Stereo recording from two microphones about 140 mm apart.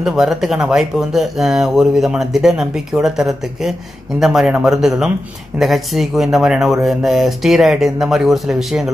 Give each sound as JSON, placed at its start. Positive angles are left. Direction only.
{"t": 0.0, "sound": "speech", "side_deg": -5}